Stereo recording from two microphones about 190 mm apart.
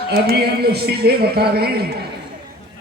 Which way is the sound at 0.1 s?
55° right (ahead or behind).